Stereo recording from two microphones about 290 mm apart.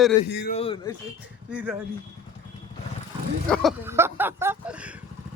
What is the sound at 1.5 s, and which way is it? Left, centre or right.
Speech, centre.